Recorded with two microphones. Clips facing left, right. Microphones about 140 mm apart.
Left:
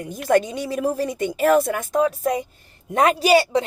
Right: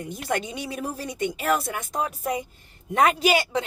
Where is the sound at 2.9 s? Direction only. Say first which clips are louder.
Left 4 dB; 35° left (ahead or behind).